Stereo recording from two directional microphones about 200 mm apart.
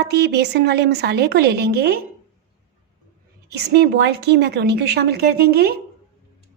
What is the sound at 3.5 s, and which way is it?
Speech, 55° right (ahead or behind).